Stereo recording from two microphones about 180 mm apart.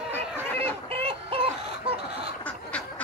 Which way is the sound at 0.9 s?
30° right (ahead or behind).